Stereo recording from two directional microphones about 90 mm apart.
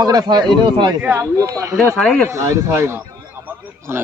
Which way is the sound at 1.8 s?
10° left (ahead or behind).